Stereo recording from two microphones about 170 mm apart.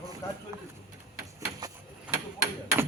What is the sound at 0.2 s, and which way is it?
Speech, 20° left (ahead or behind).